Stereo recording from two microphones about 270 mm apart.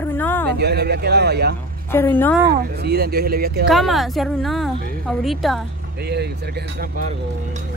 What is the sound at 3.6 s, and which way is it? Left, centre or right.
Speech, centre.